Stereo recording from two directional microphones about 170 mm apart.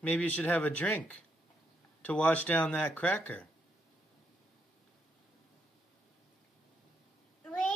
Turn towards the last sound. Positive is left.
turn(degrees=5)  # may be behind; listen again after turning